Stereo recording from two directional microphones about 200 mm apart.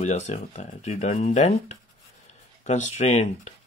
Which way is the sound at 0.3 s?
40° left (ahead or behind).